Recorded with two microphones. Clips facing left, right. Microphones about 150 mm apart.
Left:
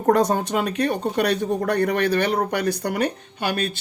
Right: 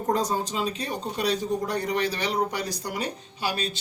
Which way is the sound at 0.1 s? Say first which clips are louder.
Left 8 dB; 65° left (ahead or behind).